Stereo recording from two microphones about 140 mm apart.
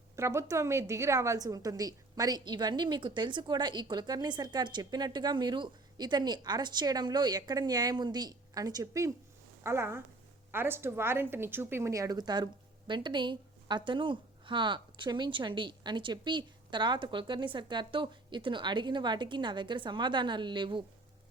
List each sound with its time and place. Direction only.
0.2 s a woman's voice: 20° right (ahead or behind); by 20.8 s 35° right (ahead or behind)